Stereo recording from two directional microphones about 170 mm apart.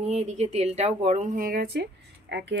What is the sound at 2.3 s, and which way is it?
Speech, 90° right.